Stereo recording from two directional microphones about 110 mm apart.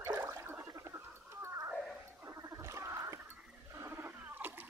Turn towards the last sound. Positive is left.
turn(degrees=-20)  # may be behind; listen again after turning